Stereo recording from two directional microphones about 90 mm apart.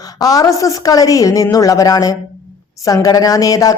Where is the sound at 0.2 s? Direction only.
45° left (ahead or behind).